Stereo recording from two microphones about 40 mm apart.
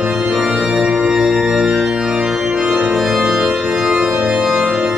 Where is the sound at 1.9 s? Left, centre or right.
Centre.